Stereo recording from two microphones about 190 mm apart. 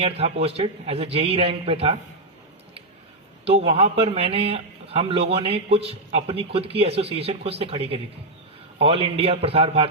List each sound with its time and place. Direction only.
0.0 s speech: 30° right (ahead or behind)
3.4 s speech: 30° right (ahead or behind)